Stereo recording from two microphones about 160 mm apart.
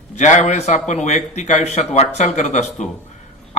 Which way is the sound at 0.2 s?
45° left (ahead or behind).